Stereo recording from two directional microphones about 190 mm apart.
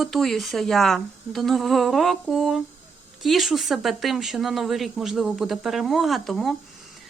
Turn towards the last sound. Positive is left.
turn(degrees=0)  # may be behind; listen again after turning